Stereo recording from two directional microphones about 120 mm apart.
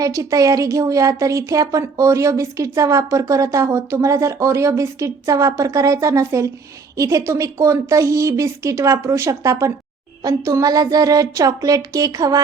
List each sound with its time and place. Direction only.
0.0 s speech: 30° right (ahead or behind)